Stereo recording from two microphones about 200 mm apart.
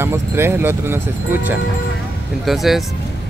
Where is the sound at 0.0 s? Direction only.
10° right (ahead or behind).